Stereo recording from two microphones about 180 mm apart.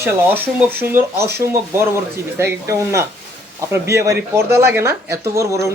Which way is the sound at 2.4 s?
15° right (ahead or behind).